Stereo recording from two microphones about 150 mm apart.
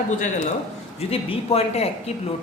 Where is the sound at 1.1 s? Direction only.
40° left (ahead or behind).